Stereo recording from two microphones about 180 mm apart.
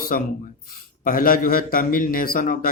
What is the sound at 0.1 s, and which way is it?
Speech, 50° left (ahead or behind).